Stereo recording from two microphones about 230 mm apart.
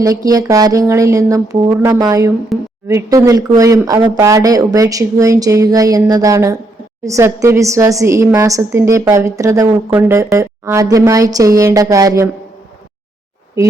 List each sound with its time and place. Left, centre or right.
0.0 s a woman's voice: centre
2.5 s a sound: centre
2.8 s a woman's voice: centre
13.6 s a woman's voice: centre